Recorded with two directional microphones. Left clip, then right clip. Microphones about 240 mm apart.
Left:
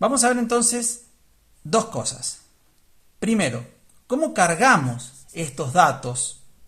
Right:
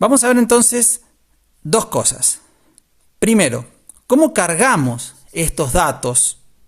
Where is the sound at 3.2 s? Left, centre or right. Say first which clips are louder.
Right 8 dB; right.